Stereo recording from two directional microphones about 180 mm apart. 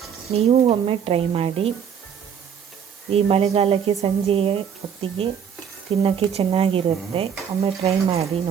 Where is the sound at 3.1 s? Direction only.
35° right (ahead or behind).